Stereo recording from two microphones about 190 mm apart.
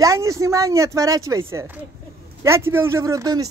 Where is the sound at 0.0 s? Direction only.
15° right (ahead or behind).